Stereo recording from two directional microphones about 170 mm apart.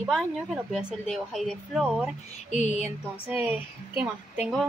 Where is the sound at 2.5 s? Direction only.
45° left (ahead or behind).